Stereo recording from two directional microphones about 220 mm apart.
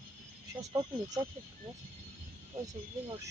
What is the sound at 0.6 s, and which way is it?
Speech, 15° right (ahead or behind).